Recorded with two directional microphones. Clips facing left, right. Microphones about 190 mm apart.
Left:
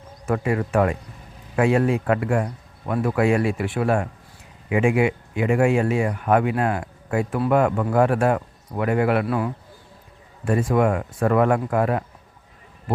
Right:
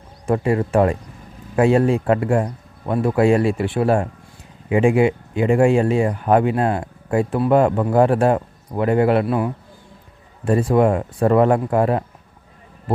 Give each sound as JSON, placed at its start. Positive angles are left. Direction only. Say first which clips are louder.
{"t": 0.3, "sound": "speech", "louder": "right 4 dB", "side_deg": -30}